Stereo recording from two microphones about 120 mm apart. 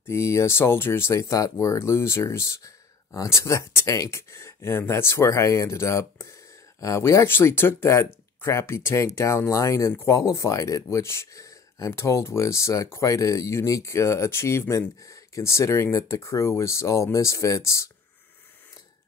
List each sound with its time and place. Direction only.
0.1 s speech: 25° left (ahead or behind)